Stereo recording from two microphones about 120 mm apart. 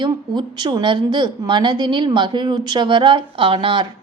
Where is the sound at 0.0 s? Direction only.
40° right (ahead or behind).